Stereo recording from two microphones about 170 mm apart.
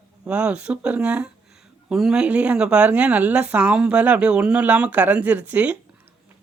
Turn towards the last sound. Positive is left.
turn(degrees=-10)  # may be behind; listen again after turning